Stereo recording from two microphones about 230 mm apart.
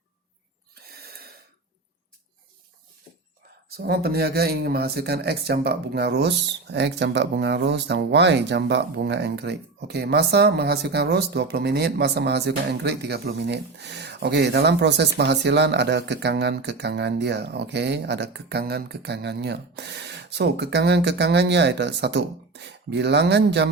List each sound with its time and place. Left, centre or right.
0.9 s gasp: right
3.7 s speech: right